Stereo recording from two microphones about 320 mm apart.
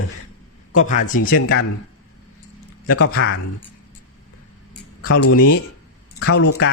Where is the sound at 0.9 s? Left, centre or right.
Left.